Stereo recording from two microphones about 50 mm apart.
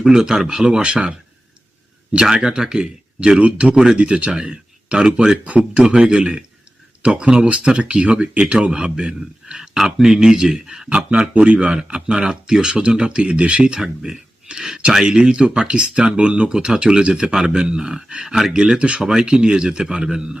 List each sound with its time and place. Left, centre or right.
0.0 s speech: centre
2.2 s a man's voice: centre